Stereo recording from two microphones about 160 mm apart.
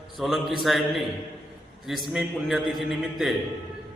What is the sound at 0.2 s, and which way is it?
A man's voice, centre (ahead or behind).